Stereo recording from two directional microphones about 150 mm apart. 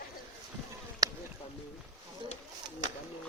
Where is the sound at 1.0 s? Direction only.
25° right (ahead or behind).